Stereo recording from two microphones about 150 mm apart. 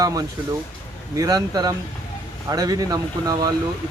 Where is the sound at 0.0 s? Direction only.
25° right (ahead or behind).